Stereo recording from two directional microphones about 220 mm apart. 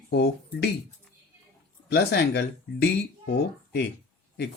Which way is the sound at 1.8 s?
50° left (ahead or behind).